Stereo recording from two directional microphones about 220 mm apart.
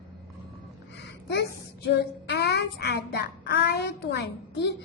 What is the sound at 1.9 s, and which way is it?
Child singing, 50° left (ahead or behind).